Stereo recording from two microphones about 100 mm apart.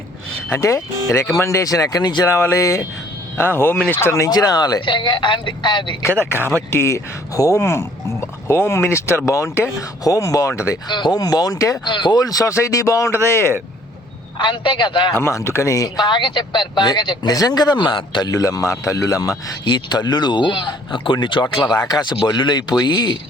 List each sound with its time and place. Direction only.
0.5 s speech: 30° left (ahead or behind)
2.2 s speech: 30° left (ahead or behind)
4.3 s speech: 40° left (ahead or behind)
6.0 s speech: 20° left (ahead or behind)
10.8 s speech: 50° left (ahead or behind)
11.9 s speech: 50° left (ahead or behind); by 13.4 s 25° left (ahead or behind)
14.3 s speech: 55° left (ahead or behind)
15.1 s speech: 30° left (ahead or behind); by 18.3 s 50° left (ahead or behind)
18.3 s speech: 35° left (ahead or behind)
19.6 s speech: 45° left (ahead or behind)